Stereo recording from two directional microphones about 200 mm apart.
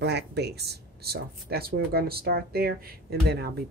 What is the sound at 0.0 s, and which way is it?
Speech, 55° right (ahead or behind).